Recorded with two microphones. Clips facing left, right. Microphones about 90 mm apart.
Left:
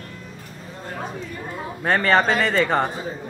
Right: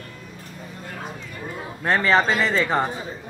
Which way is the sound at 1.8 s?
Centre (ahead or behind).